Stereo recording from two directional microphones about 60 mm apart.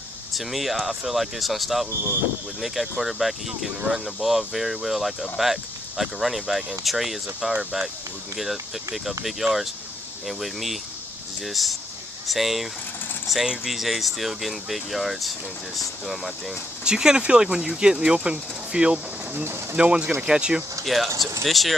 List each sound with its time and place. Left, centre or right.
0.3 s speech: centre
16.8 s speech: centre
19.3 s speech: right
19.8 s speech: centre
20.8 s speech: centre